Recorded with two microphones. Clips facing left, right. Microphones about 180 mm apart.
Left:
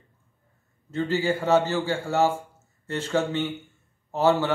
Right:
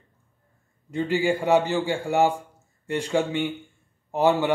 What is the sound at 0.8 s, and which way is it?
A man's voice, 15° right (ahead or behind).